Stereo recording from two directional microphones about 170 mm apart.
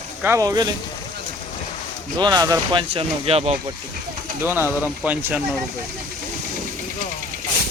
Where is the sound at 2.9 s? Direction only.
35° right (ahead or behind).